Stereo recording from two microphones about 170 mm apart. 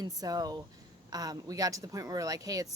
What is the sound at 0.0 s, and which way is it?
Speech, 25° right (ahead or behind).